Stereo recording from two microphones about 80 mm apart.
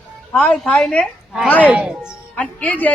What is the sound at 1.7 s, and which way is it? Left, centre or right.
Speech, centre.